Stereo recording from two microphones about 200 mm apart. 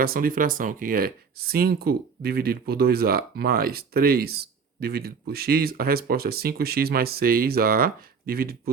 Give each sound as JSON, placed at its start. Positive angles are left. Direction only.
{"t": 0.0, "sound": "speech", "side_deg": -45}